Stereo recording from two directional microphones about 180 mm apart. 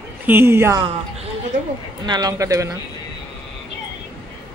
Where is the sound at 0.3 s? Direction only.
10° right (ahead or behind).